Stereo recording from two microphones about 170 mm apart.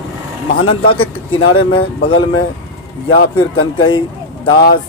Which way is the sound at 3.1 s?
30° left (ahead or behind).